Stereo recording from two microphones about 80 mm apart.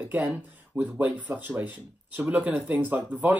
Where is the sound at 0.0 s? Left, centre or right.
Centre.